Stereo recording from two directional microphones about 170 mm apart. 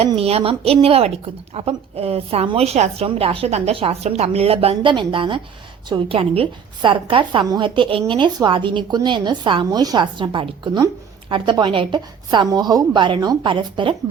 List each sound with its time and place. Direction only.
0.2 s a woman's voice: 35° right (ahead or behind)